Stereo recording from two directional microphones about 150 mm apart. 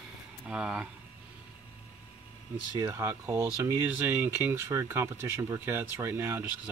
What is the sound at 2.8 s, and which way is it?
Speech, 20° right (ahead or behind).